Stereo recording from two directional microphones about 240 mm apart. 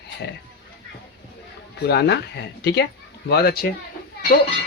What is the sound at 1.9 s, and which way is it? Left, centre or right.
Speech, left.